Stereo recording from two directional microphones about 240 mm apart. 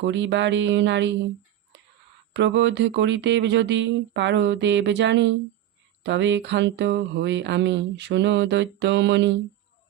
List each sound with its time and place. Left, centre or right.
0.0 s mantra: right
2.3 s mantra: right